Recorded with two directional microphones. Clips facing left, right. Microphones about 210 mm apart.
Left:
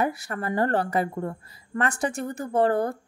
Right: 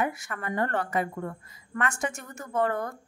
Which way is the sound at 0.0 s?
35° left (ahead or behind).